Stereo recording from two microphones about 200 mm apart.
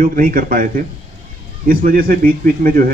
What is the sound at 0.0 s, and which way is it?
A man's voice, 45° right (ahead or behind).